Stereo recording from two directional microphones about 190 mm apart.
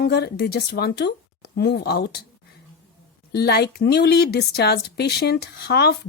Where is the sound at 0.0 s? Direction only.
55° left (ahead or behind).